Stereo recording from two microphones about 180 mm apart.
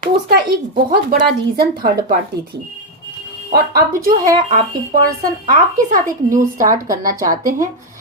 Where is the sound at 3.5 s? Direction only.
55° right (ahead or behind).